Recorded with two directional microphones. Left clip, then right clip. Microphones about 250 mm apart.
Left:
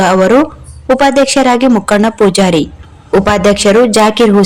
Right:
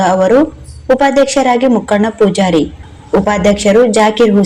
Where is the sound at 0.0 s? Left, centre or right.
Left.